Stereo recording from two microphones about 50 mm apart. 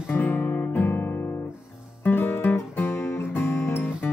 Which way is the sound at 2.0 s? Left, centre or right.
Left.